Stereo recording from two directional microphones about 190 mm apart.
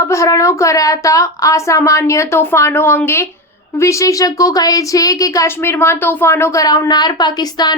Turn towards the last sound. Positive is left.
turn(degrees=20)  # may be behind; listen again after turning